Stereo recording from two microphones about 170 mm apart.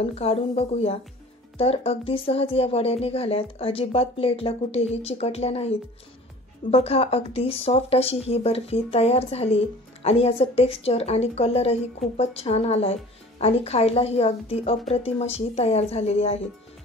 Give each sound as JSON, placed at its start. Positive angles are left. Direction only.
{"t": 0.0, "sound": "speech", "side_deg": 35}